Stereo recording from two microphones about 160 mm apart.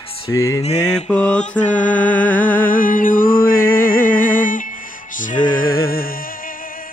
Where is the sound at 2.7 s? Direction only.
60° left (ahead or behind).